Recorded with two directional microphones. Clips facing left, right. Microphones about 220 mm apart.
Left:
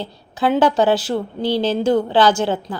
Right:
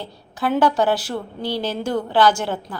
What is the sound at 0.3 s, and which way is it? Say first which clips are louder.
A woman's voice: left 3 dB; 20° left (ahead or behind).